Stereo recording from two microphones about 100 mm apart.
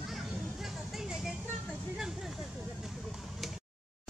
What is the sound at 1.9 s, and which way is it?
Vehicle, 5° right (ahead or behind).